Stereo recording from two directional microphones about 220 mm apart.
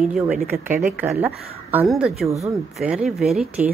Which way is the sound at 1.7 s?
Centre (ahead or behind).